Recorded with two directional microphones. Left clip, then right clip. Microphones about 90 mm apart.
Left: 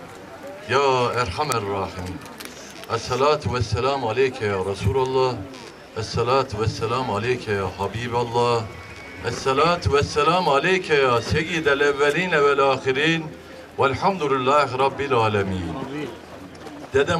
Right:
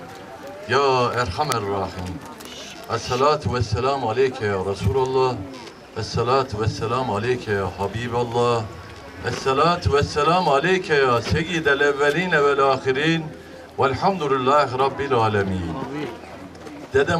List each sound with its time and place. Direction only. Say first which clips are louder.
0.7 s a man's voice: right 1 dB; 5° left (ahead or behind)